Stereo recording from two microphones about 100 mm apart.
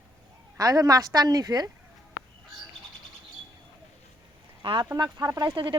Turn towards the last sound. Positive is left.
turn(degrees=-50)  # may be behind; listen again after turning